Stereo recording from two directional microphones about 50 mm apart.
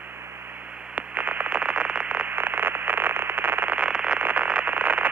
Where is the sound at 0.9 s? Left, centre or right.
Right.